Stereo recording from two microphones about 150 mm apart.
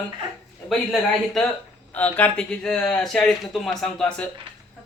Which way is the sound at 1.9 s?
10° left (ahead or behind).